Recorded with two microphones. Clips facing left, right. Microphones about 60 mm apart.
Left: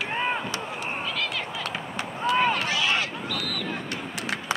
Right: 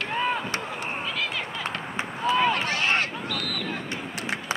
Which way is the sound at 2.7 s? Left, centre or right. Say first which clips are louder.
Right 1 dB; right.